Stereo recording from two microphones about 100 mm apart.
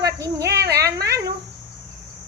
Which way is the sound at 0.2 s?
30° right (ahead or behind).